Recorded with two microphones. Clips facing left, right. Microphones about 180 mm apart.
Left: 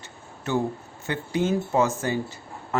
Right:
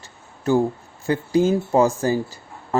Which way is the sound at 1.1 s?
35° right (ahead or behind).